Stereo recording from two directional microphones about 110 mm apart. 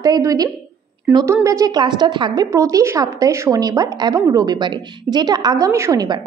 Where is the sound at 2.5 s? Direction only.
30° right (ahead or behind).